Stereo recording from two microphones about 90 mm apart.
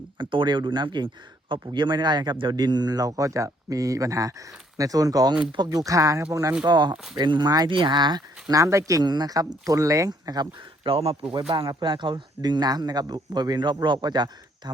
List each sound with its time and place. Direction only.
0.2 s speech: 65° right (ahead or behind); by 6.2 s 40° right (ahead or behind)
6.7 s speech: 55° right (ahead or behind)
6.9 s speech: 5° right (ahead or behind)
7.2 s speech: 55° right (ahead or behind); by 9.0 s 35° right (ahead or behind)
9.0 s speech: 50° right (ahead or behind)
10.8 s speech: 90° right; by 14.7 s 55° right (ahead or behind)